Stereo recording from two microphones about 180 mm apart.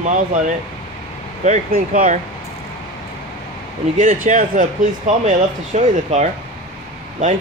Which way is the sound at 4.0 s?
50° right (ahead or behind).